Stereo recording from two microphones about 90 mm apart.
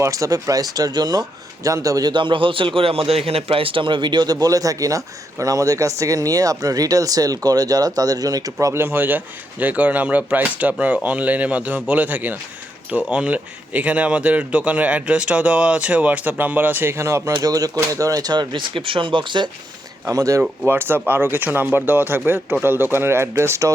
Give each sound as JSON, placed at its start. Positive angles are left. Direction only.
{"t": 0.0, "sound": "a man's voice", "side_deg": -35}
{"t": 1.6, "sound": "a man's voice", "side_deg": -40}
{"t": 8.6, "sound": "speech", "side_deg": -30}
{"t": 20.1, "sound": "speech", "side_deg": -35}
{"t": 20.7, "sound": "speech", "side_deg": -25}